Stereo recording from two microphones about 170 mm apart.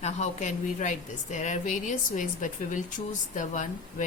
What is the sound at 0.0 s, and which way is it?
A woman's voice, 45° left (ahead or behind).